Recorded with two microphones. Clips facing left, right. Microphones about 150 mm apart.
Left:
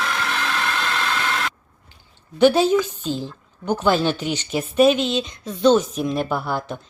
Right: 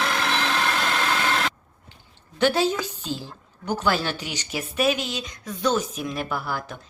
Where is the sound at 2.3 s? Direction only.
15° left (ahead or behind).